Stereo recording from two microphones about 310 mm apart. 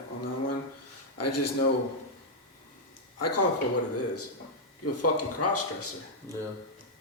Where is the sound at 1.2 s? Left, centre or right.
Left.